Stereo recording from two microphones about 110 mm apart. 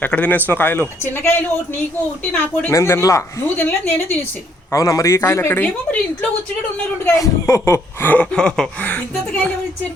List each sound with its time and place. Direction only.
0.0 s speech: 15° left (ahead or behind)
3.4 s speech: 15° left (ahead or behind)
4.7 s speech: 30° left (ahead or behind)
7.2 s speech: 25° left (ahead or behind)
8.1 s speech: 10° left (ahead or behind)